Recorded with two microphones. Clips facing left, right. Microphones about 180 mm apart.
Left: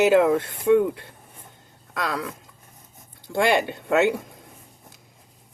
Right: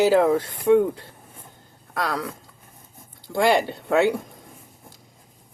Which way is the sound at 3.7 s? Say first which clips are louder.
Even; 20° left (ahead or behind).